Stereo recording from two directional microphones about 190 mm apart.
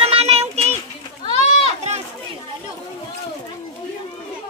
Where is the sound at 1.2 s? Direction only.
30° left (ahead or behind).